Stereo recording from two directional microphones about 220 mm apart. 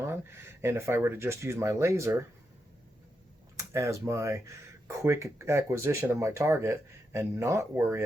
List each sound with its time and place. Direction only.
0.0 s speech: 10° right (ahead or behind)
3.6 s speech: 15° right (ahead or behind)